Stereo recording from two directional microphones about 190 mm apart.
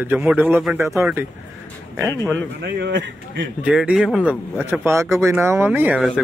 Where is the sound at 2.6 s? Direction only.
70° right (ahead or behind).